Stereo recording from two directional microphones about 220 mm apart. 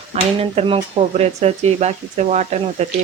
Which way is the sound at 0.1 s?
25° right (ahead or behind).